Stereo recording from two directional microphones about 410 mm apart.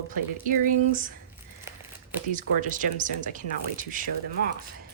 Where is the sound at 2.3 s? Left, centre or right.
Centre.